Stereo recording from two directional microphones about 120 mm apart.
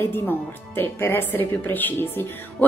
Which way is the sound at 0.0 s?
20° left (ahead or behind).